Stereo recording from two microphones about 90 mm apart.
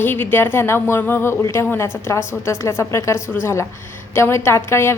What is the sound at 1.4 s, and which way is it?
A woman's voice, 30° left (ahead or behind).